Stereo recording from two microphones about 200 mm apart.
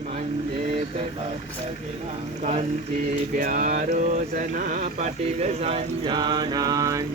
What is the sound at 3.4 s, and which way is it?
Speech, 45° right (ahead or behind).